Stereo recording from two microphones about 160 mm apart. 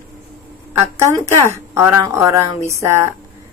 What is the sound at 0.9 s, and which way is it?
Speech, 15° right (ahead or behind).